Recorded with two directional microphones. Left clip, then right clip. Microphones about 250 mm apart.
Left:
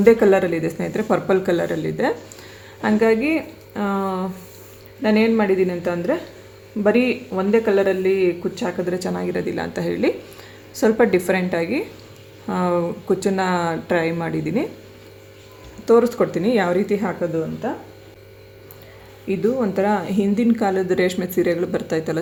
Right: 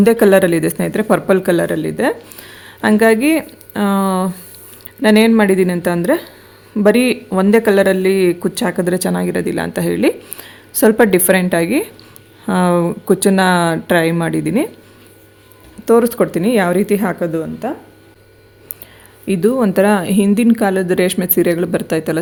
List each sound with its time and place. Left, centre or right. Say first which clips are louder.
0.0 s speech: right 4 dB; right
15.9 s speech: right 3 dB; right
19.3 s speech: right 6 dB; right